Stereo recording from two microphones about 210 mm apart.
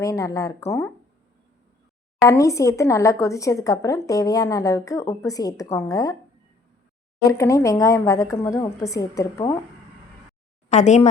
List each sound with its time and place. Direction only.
0.0 s speech: 15° left (ahead or behind)
2.2 s speech: 15° left (ahead or behind)
7.3 s speech: 15° left (ahead or behind)
10.7 s speech: 35° left (ahead or behind)